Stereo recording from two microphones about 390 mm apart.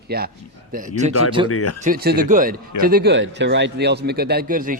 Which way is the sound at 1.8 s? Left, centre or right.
Right.